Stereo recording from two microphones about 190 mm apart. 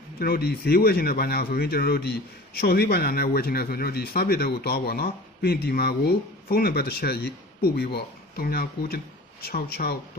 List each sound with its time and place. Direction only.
0.2 s speech: 55° left (ahead or behind)